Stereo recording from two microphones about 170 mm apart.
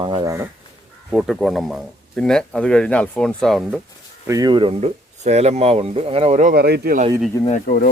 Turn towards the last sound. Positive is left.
turn(degrees=55)  # may be behind; listen again after turning